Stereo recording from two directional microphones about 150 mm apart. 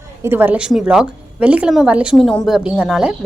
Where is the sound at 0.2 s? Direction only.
15° right (ahead or behind).